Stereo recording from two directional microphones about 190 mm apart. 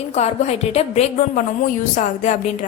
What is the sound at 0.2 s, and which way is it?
A woman's voice, 35° left (ahead or behind).